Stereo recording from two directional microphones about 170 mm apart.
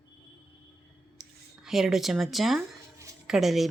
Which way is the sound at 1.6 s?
Centre (ahead or behind).